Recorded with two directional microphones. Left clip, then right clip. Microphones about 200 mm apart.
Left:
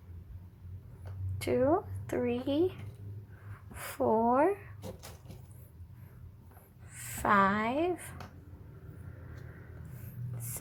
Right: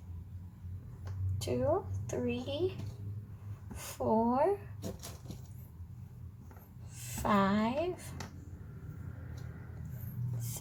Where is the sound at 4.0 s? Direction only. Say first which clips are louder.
Left 3 dB; 25° left (ahead or behind).